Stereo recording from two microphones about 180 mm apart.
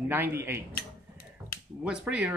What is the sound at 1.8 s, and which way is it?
Speech, 5° right (ahead or behind).